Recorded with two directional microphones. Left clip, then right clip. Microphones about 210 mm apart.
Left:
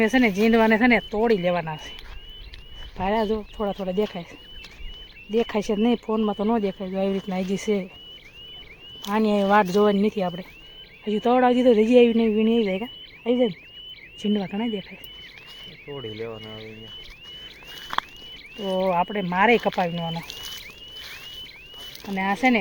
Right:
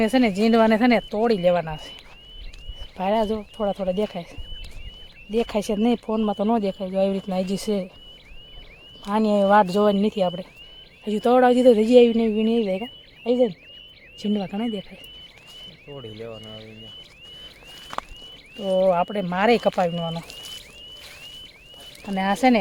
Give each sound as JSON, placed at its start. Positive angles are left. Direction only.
{"t": 0.0, "sound": "a man's voice", "side_deg": -15}
{"t": 3.0, "sound": "a man's voice", "side_deg": -10}
{"t": 5.3, "sound": "a man's voice", "side_deg": -10}
{"t": 9.0, "sound": "a man's voice", "side_deg": -10}
{"t": 15.9, "sound": "speech", "side_deg": 15}
{"t": 18.5, "sound": "speech", "side_deg": 5}
{"t": 18.8, "sound": "a man's voice", "side_deg": -10}
{"t": 22.1, "sound": "speech", "side_deg": -20}